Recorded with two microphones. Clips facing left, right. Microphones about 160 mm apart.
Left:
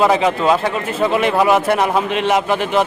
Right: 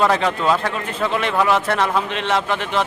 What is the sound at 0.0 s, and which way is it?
Speech, 5° left (ahead or behind).